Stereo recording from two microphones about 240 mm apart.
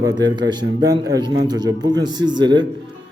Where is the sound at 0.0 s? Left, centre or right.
Centre.